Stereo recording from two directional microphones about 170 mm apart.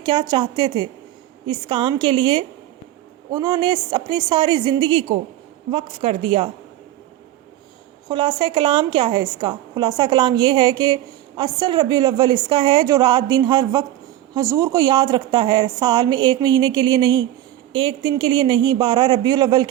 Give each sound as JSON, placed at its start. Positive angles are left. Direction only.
{"t": 0.0, "sound": "a woman's voice", "side_deg": -25}
{"t": 8.0, "sound": "a woman's voice", "side_deg": -25}